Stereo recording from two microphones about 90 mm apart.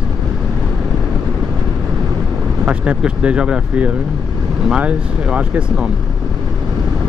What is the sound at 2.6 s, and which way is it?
Speech, 15° right (ahead or behind).